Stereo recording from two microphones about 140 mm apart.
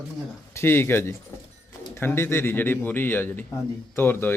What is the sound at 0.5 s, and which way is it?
Speech, 15° left (ahead or behind).